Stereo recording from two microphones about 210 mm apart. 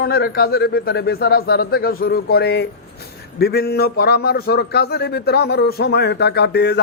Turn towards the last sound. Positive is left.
turn(degrees=55)  # may be behind; listen again after turning